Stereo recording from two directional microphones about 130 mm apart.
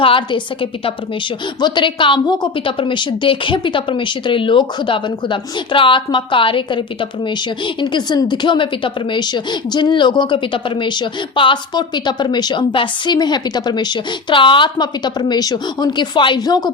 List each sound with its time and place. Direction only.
0.0 s a woman's voice: 40° left (ahead or behind)